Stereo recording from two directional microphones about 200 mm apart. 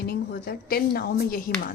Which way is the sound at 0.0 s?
50° left (ahead or behind).